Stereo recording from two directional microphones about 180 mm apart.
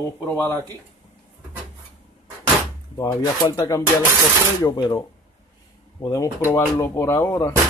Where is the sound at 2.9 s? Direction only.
20° left (ahead or behind).